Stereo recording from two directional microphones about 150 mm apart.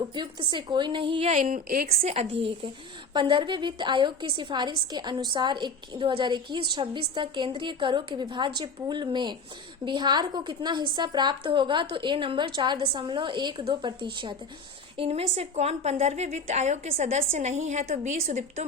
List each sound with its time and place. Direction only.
0.1 s a woman's voice: 30° right (ahead or behind)
1.3 s a woman's voice: 60° right (ahead or behind); by 2.0 s 80° right
2.0 s a woman's voice: 40° right (ahead or behind)